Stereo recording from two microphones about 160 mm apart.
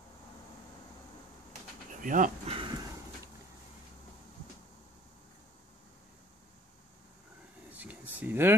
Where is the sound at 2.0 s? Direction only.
55° right (ahead or behind).